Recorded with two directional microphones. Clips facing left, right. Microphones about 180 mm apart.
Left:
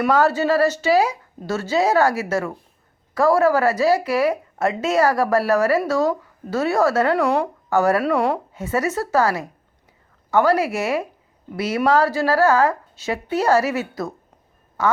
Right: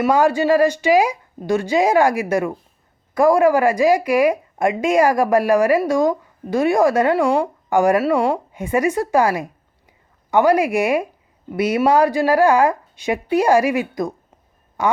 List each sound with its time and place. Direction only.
0.1 s speech: 15° right (ahead or behind)
8.0 s speech: centre (ahead or behind)
8.5 s speech: 15° right (ahead or behind)